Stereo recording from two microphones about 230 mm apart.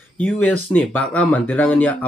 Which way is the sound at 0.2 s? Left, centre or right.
Centre.